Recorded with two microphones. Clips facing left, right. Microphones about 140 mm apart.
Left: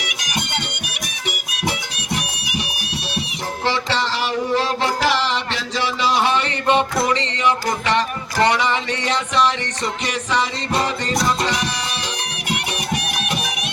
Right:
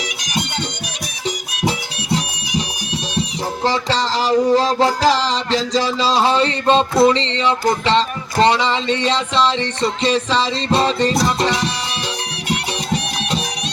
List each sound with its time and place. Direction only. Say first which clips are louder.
3.6 s music: right 2 dB; 40° right (ahead or behind)
6.1 s music: right 4 dB; 30° right (ahead or behind)